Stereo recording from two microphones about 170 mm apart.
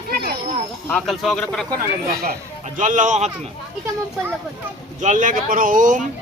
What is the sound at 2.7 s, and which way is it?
Speech, 45° right (ahead or behind).